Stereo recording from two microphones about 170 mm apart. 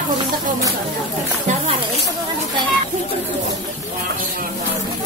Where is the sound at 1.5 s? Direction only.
45° right (ahead or behind).